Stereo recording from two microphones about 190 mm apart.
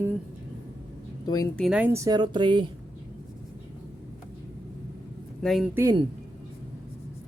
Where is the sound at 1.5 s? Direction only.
5° right (ahead or behind); by 2.6 s 25° right (ahead or behind).